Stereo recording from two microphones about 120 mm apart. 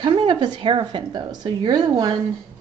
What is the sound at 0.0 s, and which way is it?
A woman's voice, 45° right (ahead or behind).